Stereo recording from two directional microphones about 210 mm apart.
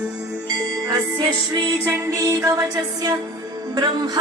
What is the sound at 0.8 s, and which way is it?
Music, 15° right (ahead or behind).